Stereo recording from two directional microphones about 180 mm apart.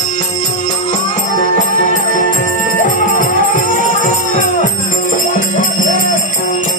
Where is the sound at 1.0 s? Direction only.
45° left (ahead or behind).